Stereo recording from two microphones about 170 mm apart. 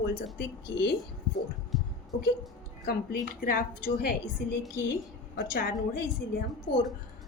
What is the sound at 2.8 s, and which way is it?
A woman's voice, 65° left (ahead or behind).